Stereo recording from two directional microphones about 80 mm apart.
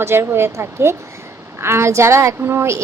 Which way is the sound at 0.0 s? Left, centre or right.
Right.